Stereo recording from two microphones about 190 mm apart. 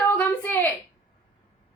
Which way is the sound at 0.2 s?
10° left (ahead or behind).